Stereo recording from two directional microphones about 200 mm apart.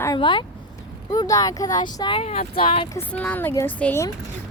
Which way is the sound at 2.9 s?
5° left (ahead or behind).